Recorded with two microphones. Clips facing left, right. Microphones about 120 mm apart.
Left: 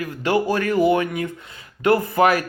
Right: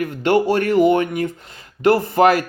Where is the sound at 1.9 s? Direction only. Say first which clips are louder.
Right 3 dB; 30° right (ahead or behind).